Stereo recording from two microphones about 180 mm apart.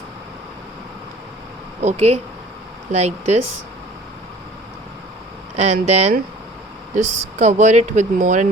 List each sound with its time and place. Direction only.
1.8 s speech: 40° right (ahead or behind)
5.5 s speech: 40° right (ahead or behind)